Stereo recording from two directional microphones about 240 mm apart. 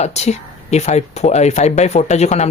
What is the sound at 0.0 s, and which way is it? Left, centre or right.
Speech, left.